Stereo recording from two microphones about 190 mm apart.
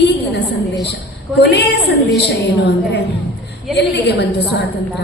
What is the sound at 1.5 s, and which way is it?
Speech, 60° left (ahead or behind).